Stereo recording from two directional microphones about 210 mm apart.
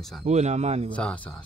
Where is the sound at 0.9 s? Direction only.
5° left (ahead or behind).